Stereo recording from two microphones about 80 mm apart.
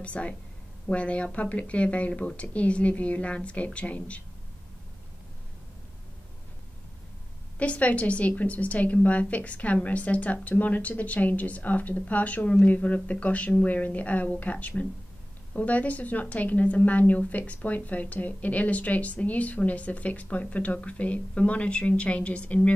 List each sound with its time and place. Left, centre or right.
0.0 s speech: centre
7.5 s a woman's voice: centre